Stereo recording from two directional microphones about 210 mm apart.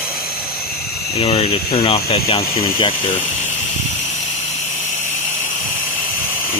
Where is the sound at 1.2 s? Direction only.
30° left (ahead or behind).